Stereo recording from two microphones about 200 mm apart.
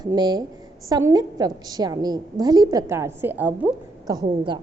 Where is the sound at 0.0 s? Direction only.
20° right (ahead or behind).